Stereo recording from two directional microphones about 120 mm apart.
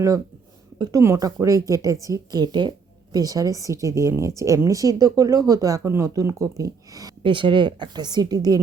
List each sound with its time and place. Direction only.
0.8 s a woman's voice: 30° right (ahead or behind)
7.2 s a woman's voice: 45° right (ahead or behind)